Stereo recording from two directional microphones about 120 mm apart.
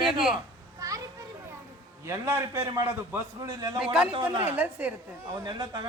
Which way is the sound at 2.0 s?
25° right (ahead or behind).